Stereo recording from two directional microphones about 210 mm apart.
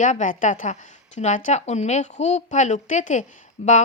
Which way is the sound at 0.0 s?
35° left (ahead or behind).